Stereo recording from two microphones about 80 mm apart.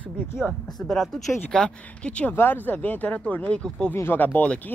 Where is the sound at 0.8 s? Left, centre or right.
Centre.